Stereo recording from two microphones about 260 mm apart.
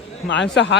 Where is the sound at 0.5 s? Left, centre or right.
Left.